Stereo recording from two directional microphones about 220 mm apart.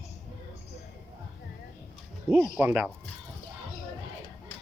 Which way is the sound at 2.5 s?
10° right (ahead or behind).